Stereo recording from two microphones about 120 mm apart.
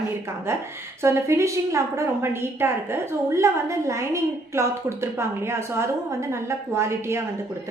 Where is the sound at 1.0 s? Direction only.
25° right (ahead or behind).